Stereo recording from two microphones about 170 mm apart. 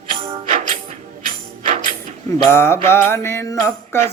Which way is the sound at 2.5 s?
15° left (ahead or behind).